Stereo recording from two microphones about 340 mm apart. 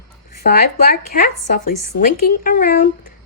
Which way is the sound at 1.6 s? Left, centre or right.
Left.